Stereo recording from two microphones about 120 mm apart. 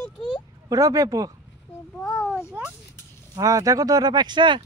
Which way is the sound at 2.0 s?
5° left (ahead or behind).